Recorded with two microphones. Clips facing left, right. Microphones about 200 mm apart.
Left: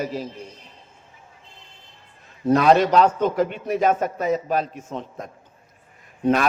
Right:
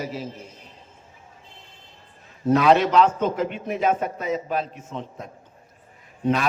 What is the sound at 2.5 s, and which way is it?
A man's voice, 40° left (ahead or behind).